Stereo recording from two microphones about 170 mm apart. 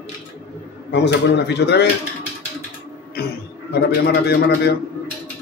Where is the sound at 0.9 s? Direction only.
90° left.